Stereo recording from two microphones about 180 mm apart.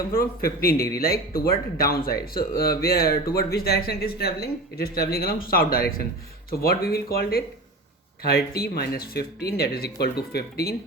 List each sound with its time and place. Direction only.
0.1 s speech: 55° left (ahead or behind)